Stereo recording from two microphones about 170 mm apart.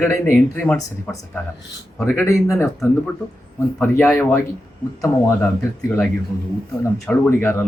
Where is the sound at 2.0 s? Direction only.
15° left (ahead or behind).